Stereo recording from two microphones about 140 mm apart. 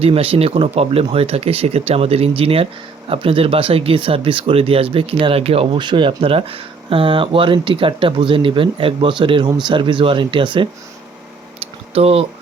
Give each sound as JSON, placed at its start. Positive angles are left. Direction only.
{"t": 0.0, "sound": "speech", "side_deg": -40}
{"t": 11.9, "sound": "speech", "side_deg": -45}